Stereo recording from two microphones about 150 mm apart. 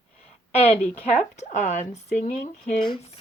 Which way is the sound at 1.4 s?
55° left (ahead or behind).